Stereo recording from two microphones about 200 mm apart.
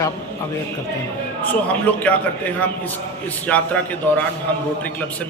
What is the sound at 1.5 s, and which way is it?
A man's voice, 10° left (ahead or behind).